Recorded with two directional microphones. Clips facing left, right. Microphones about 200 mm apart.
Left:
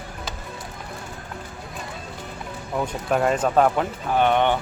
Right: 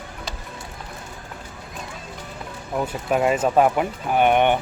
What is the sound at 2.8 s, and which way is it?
Speech, 5° right (ahead or behind).